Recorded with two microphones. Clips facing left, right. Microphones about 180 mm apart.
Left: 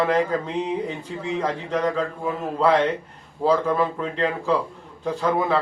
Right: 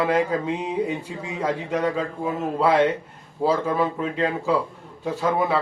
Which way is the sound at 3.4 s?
10° right (ahead or behind).